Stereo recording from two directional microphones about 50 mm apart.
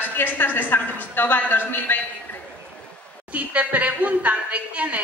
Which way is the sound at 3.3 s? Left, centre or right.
Right.